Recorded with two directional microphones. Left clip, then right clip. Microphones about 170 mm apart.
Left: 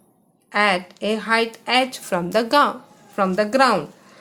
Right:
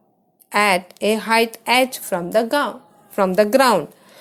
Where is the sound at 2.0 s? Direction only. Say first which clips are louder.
Right 1 dB; 20° right (ahead or behind).